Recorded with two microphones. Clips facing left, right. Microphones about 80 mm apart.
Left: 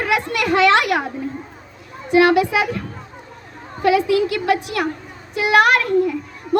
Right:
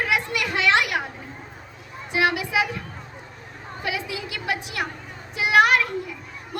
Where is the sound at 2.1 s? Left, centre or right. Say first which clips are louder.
Left 10 dB; left.